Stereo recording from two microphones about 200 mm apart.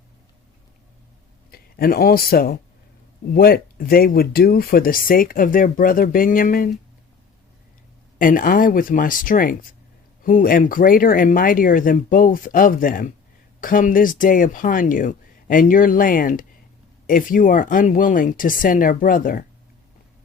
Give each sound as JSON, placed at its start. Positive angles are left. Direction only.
{"t": 1.5, "sound": "speech", "side_deg": 50}
{"t": 8.2, "sound": "speech", "side_deg": 45}